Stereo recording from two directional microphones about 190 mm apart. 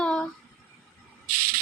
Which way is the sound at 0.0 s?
5° left (ahead or behind).